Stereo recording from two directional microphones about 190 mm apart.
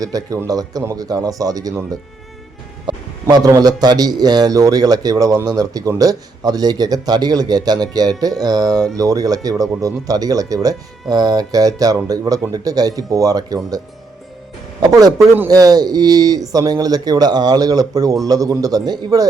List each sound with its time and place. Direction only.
0.0 s a man's voice: 20° right (ahead or behind)
14.8 s a man's voice: 20° right (ahead or behind)